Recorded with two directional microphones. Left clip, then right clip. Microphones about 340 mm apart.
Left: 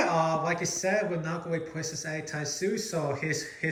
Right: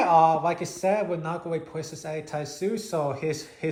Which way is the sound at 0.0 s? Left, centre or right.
Centre.